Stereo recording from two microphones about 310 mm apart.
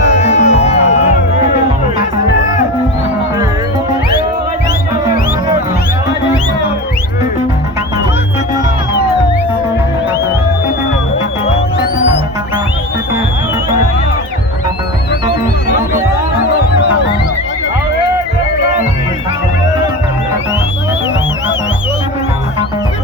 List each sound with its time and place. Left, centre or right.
0.2 s music: left